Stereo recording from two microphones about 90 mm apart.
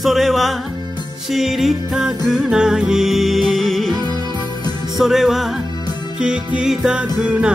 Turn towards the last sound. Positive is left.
turn(degrees=-10)  # may be behind; listen again after turning